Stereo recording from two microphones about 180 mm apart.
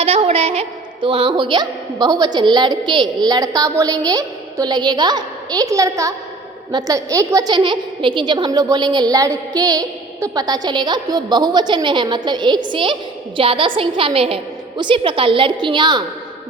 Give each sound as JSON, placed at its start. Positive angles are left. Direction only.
{"t": 0.0, "sound": "a woman's voice", "side_deg": -35}